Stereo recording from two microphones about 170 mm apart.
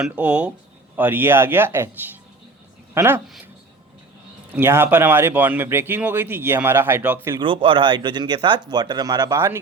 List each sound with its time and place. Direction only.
0.0 s a woman's voice: 5° right (ahead or behind)
4.5 s speech: 15° right (ahead or behind)
7.3 s speech: 30° right (ahead or behind)